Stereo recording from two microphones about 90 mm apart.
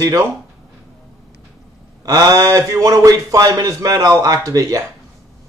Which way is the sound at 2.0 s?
40° right (ahead or behind).